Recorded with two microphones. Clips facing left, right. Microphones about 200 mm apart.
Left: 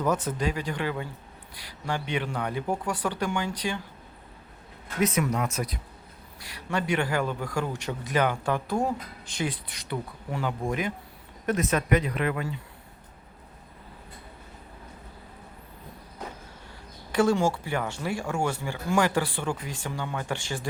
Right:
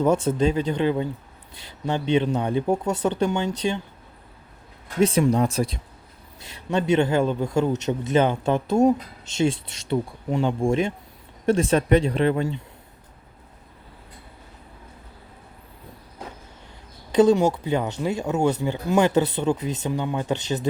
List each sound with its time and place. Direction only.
0.0 s a man's voice: 25° right (ahead or behind)
4.9 s a man's voice: 30° right (ahead or behind)
17.1 s a man's voice: 20° right (ahead or behind)